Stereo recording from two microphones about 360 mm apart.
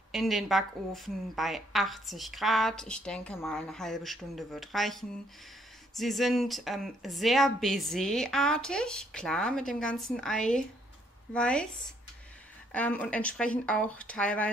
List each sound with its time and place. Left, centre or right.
0.1 s a woman's voice: centre
12.7 s a woman's voice: centre